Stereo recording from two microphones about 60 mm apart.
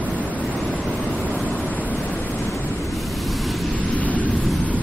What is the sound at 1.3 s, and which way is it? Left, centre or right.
Waves, left.